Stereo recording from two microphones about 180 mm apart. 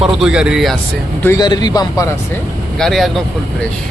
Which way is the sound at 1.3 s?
25° left (ahead or behind).